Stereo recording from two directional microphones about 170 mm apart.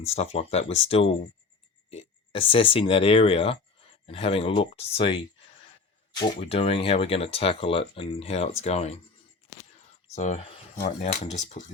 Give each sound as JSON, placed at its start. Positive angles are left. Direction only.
{"t": 0.0, "sound": "speech", "side_deg": 40}
{"t": 10.2, "sound": "speech", "side_deg": 45}